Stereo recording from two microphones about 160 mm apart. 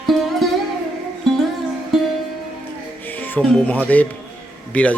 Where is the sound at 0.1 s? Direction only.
Centre (ahead or behind).